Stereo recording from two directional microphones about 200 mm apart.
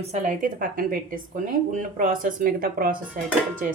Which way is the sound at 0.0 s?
35° right (ahead or behind).